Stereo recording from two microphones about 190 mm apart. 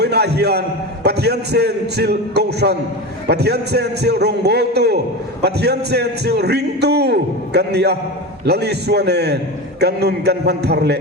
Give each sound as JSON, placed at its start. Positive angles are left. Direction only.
{"t": 0.0, "sound": "a man's voice", "side_deg": -60}